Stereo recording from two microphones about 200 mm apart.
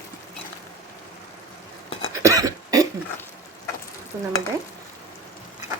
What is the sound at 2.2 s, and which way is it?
Cough, 15° right (ahead or behind).